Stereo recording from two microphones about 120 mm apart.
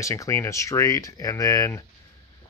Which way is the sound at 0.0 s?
25° left (ahead or behind).